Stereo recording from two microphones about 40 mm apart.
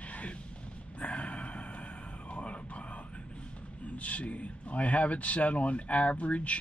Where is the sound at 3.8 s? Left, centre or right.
Left.